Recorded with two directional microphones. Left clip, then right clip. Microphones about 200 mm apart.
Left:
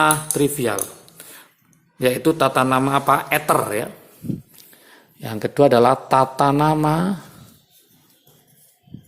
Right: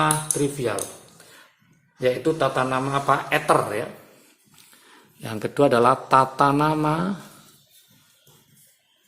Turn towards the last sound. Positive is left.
turn(degrees=20)  # may be behind; listen again after turning